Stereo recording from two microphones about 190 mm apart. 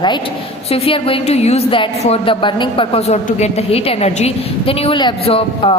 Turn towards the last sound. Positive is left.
turn(degrees=30)  # may be behind; listen again after turning